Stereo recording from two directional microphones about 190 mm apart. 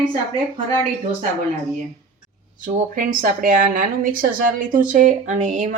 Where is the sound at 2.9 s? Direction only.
45° right (ahead or behind).